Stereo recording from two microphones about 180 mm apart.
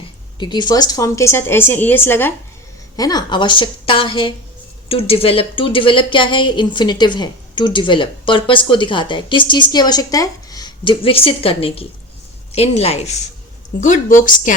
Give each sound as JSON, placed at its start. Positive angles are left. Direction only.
{"t": 0.3, "sound": "a woman's voice", "side_deg": 25}